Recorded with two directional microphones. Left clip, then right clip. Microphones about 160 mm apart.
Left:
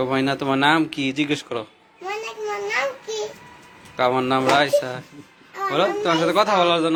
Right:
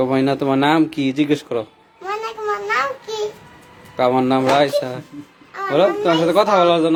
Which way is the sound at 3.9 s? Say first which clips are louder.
Right 3 dB; 30° right (ahead or behind).